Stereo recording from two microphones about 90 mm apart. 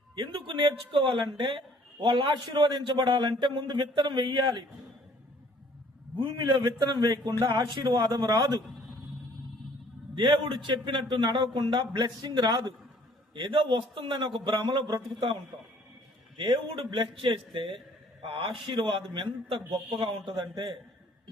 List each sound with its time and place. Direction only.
0.2 s speech: 60° right (ahead or behind)
6.4 s speech: 55° right (ahead or behind)
10.2 s speech: 60° right (ahead or behind)
16.4 s a man's voice: 70° right (ahead or behind)